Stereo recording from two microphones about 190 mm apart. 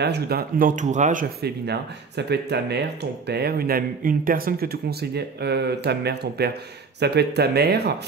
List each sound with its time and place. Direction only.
0.0 s speech: 55° right (ahead or behind); by 1.2 s 40° right (ahead or behind)
1.4 s speech: 60° right (ahead or behind)